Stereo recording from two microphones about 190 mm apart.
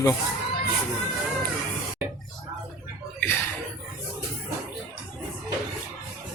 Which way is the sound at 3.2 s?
10° left (ahead or behind).